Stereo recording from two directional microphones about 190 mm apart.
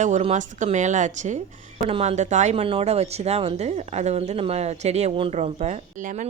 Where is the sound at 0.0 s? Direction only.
35° right (ahead or behind).